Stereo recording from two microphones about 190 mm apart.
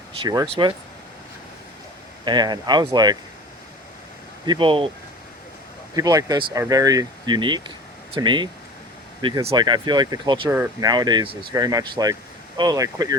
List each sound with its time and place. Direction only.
0.2 s speech: 20° right (ahead or behind)
2.2 s speech: 20° right (ahead or behind)
4.4 s speech: 25° right (ahead or behind)
6.0 s speech: 20° right (ahead or behind)